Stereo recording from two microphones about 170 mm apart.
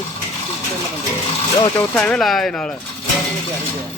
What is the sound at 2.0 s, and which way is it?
Speech, 5° left (ahead or behind).